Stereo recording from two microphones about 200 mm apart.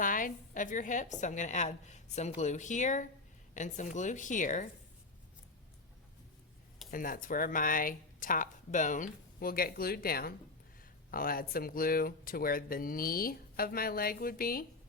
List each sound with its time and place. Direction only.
0.0 s a woman's voice: 45° left (ahead or behind)
6.9 s speech: 45° left (ahead or behind)